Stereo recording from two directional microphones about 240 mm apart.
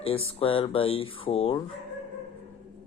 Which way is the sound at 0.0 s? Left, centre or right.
Left.